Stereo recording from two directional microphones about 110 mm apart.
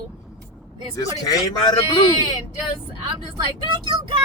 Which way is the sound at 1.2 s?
35° left (ahead or behind).